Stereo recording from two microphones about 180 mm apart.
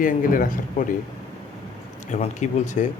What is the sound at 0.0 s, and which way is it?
Speech, 50° left (ahead or behind).